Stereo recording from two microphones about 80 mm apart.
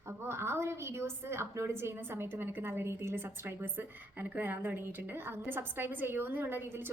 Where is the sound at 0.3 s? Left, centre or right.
Right.